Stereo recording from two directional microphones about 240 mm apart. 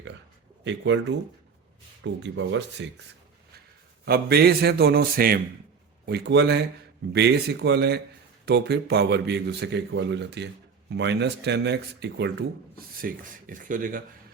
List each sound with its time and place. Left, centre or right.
0.6 s speech: right
2.2 s speech: right
4.0 s a man's voice: right